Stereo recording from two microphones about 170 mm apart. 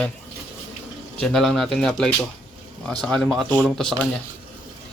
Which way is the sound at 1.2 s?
5° left (ahead or behind).